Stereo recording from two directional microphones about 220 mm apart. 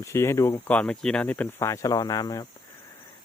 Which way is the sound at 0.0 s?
10° left (ahead or behind).